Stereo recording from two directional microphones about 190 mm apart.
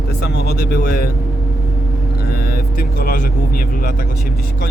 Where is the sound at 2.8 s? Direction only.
50° left (ahead or behind).